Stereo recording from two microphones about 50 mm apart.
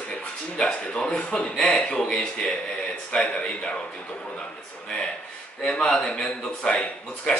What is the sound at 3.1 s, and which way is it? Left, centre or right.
Speech, centre.